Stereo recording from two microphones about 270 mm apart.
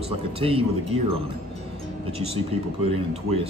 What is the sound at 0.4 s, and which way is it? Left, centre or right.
Speech, right.